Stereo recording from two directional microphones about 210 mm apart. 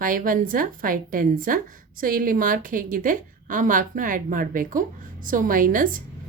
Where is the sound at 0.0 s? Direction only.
40° right (ahead or behind).